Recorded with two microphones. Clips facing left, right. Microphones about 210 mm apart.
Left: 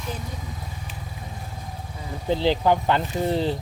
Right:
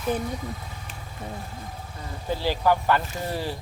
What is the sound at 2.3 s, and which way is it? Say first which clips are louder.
Speech: left 3 dB; 20° left (ahead or behind).